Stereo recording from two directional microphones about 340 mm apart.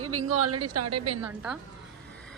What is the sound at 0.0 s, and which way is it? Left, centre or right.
Speech, right.